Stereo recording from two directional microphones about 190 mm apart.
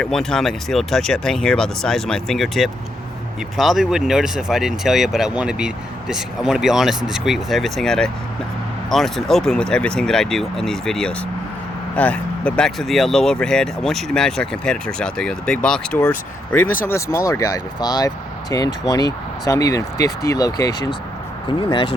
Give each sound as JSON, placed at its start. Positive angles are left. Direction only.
{"t": 0.0, "sound": "speech", "side_deg": 5}